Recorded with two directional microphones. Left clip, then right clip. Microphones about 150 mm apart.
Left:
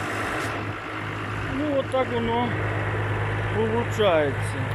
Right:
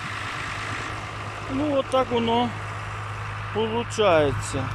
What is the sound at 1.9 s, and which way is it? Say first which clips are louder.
Speech: right 4 dB; 15° right (ahead or behind).